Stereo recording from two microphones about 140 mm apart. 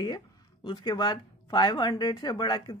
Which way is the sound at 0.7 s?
35° left (ahead or behind).